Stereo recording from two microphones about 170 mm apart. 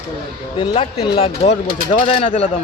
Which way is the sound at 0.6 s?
30° left (ahead or behind).